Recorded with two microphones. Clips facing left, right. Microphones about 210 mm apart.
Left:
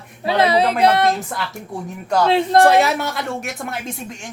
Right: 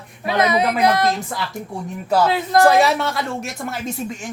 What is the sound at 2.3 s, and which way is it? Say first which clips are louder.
Speech: left 3 dB; 30° left (ahead or behind).